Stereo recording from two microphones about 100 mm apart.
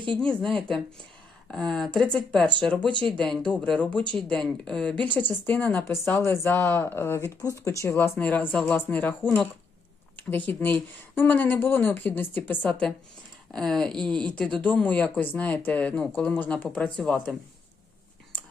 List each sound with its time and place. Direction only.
0.2 s speech: 5° left (ahead or behind)